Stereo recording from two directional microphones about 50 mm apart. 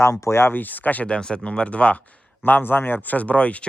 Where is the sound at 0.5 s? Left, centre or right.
Left.